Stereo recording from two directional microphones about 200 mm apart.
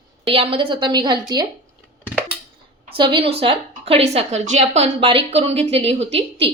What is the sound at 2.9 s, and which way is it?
A woman's voice, 25° right (ahead or behind).